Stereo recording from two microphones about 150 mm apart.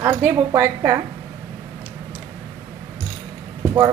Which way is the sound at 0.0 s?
20° right (ahead or behind).